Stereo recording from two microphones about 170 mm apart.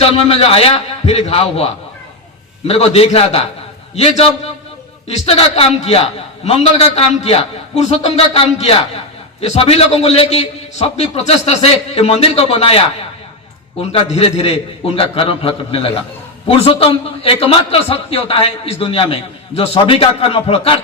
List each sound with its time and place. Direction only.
0.0 s a man's voice: 35° left (ahead or behind)
13.9 s a man's voice: 35° left (ahead or behind)